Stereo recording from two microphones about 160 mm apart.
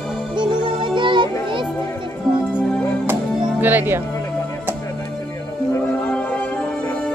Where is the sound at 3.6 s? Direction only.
10° right (ahead or behind).